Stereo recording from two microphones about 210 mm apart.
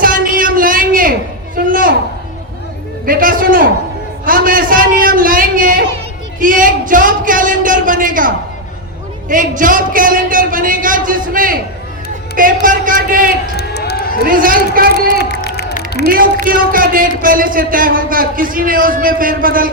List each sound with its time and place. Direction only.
0.0 s a sound: 40° right (ahead or behind)
3.1 s a man's voice: 40° right (ahead or behind)
4.3 s a sound: 40° right (ahead or behind)
9.3 s a man's voice: 40° right (ahead or behind)
12.6 s a man's voice: 40° right (ahead or behind)
13.6 s crowd: 50° left (ahead or behind)
14.3 s speech: 40° right (ahead or behind)
15.4 s crowd: 50° left (ahead or behind)
16.0 s a man's voice: 40° right (ahead or behind)